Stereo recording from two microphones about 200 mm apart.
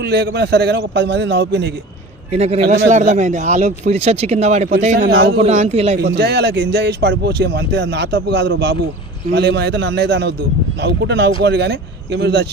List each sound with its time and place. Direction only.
0.0 s speech: 55° right (ahead or behind)
2.3 s speech: 30° right (ahead or behind)
4.9 s speech: 55° right (ahead or behind)
5.4 s speech: 35° right (ahead or behind)
6.0 s speech: 55° right (ahead or behind)